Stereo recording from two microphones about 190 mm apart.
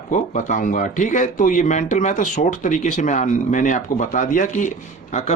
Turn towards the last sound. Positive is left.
turn(degrees=40)  # may be behind; listen again after turning